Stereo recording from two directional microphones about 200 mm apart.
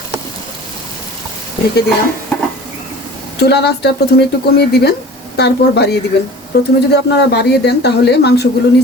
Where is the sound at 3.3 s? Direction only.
55° left (ahead or behind).